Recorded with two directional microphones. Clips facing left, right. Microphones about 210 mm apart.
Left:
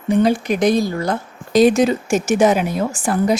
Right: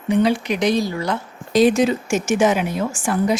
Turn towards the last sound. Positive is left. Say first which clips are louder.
# left 2 dB
turn(degrees=35)  # may be behind; listen again after turning